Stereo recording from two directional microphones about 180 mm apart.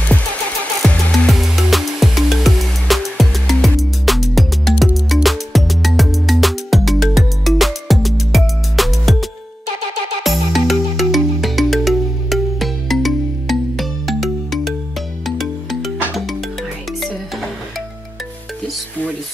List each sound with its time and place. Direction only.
0.8 s music: 5° left (ahead or behind)